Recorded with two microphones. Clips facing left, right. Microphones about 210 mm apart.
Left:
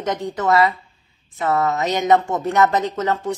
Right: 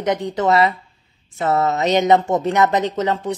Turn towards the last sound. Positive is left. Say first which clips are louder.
# right 1 dB
turn(degrees=-20)  # may be behind; listen again after turning